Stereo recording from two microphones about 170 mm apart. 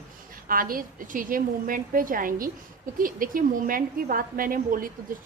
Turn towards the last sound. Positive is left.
turn(degrees=-55)  # may be behind; listen again after turning